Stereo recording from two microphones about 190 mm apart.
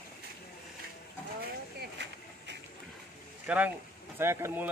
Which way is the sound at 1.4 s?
60° right (ahead or behind).